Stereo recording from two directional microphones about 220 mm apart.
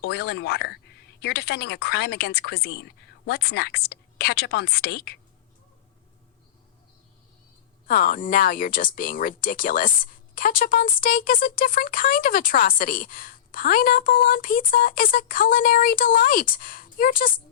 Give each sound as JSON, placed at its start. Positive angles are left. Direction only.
{"t": 0.0, "sound": "speech", "side_deg": 45}
{"t": 7.9, "sound": "speech", "side_deg": 40}